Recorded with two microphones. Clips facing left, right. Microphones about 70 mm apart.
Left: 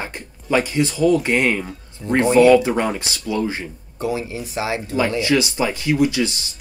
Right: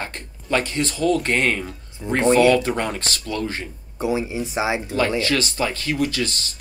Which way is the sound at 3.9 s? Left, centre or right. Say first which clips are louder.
Right 1 dB; right.